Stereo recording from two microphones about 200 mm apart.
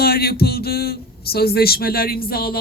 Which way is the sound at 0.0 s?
50° left (ahead or behind).